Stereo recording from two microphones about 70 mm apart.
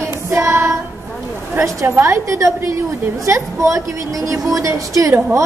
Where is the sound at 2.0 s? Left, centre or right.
Right.